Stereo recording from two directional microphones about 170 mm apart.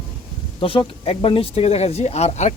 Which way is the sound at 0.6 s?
30° left (ahead or behind).